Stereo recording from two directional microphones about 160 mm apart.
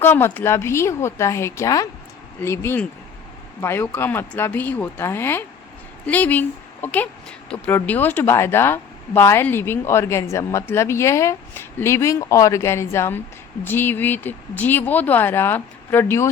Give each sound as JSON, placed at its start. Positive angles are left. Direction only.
{"t": 0.0, "sound": "speech", "side_deg": 15}